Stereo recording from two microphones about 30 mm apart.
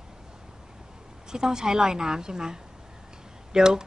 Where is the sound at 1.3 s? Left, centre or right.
Right.